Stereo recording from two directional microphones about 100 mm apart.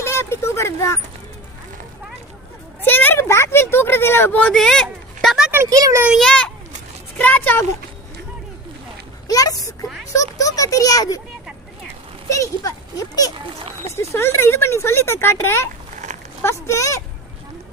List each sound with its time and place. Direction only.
0.0 s a sound: 25° left (ahead or behind)
2.8 s speech: 20° left (ahead or behind); by 5.5 s centre (ahead or behind)
5.6 s a child's voice: 35° right (ahead or behind)
6.1 s speech: 5° left (ahead or behind)
9.2 s speech: 40° left (ahead or behind)
12.3 s speech: 35° left (ahead or behind)
13.3 s a child's voice: 55° right (ahead or behind)
13.8 s speech: 30° left (ahead or behind)